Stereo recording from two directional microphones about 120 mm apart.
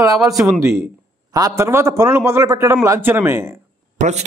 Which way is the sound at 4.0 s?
70° right (ahead or behind).